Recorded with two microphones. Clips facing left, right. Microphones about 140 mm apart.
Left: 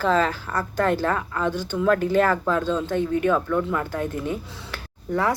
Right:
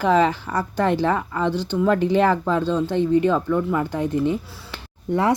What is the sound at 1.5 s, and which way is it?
Speech, 10° left (ahead or behind).